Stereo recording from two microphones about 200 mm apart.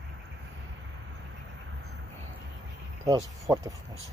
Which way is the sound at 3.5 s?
15° right (ahead or behind).